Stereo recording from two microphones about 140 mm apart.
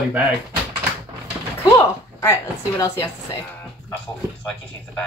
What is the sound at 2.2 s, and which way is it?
Speech, 25° left (ahead or behind).